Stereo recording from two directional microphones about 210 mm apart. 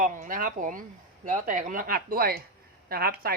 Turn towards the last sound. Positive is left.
turn(degrees=-45)  # may be behind; listen again after turning